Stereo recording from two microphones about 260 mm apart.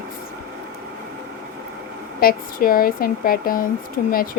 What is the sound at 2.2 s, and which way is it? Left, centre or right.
Speech, left.